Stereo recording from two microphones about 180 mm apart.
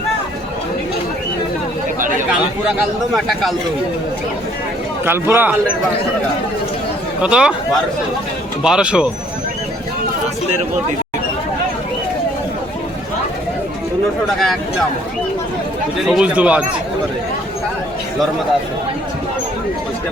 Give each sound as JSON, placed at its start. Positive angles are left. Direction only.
{"t": 2.0, "sound": "chatter", "side_deg": -45}
{"t": 2.3, "sound": "speech", "side_deg": -5}
{"t": 5.0, "sound": "speech", "side_deg": -10}
{"t": 7.2, "sound": "speech", "side_deg": -5}
{"t": 8.6, "sound": "speech", "side_deg": -5}
{"t": 14.3, "sound": "speech", "side_deg": 0}
{"t": 16.0, "sound": "speech", "side_deg": -5}